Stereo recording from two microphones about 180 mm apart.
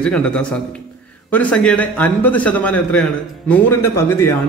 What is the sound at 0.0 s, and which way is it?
A man's voice, 5° left (ahead or behind).